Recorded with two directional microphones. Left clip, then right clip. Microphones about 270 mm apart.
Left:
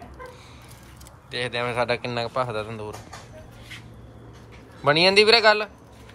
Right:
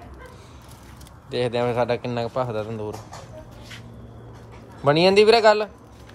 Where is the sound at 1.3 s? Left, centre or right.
Centre.